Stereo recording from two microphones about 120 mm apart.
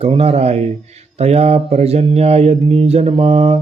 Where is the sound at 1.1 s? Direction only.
60° right (ahead or behind).